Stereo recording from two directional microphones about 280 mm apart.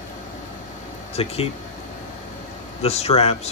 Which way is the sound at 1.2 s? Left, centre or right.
Left.